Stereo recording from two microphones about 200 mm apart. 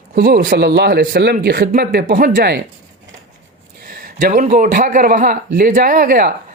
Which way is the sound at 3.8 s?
45° right (ahead or behind).